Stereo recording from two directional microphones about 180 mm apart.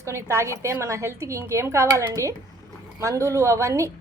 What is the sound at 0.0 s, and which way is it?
Speech, 15° right (ahead or behind).